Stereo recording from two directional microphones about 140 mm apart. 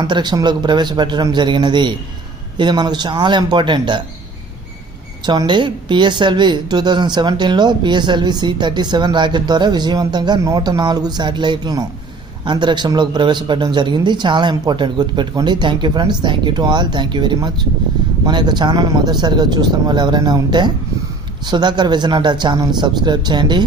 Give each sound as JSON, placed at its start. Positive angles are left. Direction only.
{"t": 0.0, "sound": "a woman's voice", "side_deg": -30}
{"t": 5.2, "sound": "a woman's voice", "side_deg": -30}